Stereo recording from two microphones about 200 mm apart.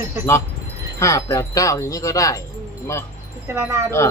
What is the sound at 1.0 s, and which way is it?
Wind chime, 15° left (ahead or behind).